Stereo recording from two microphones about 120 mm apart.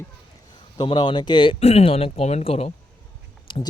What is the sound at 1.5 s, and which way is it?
Speech, 60° left (ahead or behind).